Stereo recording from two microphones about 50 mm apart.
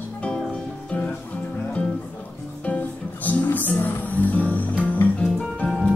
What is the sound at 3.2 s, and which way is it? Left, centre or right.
Music, left.